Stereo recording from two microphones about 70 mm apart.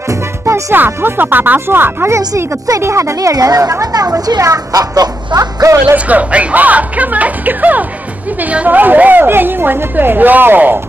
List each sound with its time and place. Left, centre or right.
0.1 s music: right
0.7 s a woman's voice: right
2.1 s speech: right
3.2 s speech: right
5.9 s a woman's voice: right